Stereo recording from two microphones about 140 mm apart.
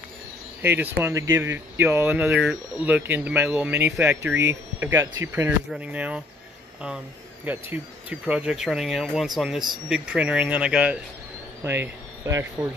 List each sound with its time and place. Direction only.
0.6 s speech: 15° right (ahead or behind)
7.4 s speech: 10° right (ahead or behind)